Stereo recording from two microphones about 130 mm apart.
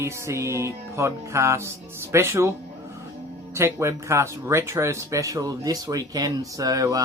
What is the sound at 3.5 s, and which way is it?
Speech, 20° right (ahead or behind).